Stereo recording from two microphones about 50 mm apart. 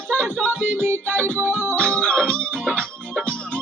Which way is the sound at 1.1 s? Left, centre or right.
Left.